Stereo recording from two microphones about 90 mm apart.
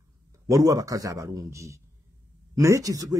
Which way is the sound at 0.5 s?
40° right (ahead or behind).